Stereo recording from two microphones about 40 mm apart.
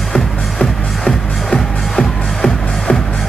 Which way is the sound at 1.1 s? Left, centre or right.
Centre.